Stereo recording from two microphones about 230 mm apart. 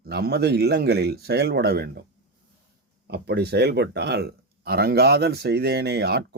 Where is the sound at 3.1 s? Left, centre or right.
Right.